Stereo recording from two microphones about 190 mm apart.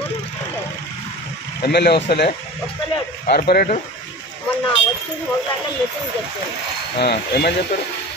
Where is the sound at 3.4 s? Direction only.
55° left (ahead or behind).